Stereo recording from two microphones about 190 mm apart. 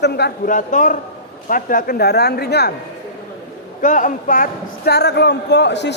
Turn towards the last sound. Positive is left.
turn(degrees=65)  # may be behind; listen again after turning